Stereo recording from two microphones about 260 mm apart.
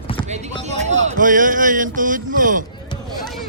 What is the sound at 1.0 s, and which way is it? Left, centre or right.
Speech, right.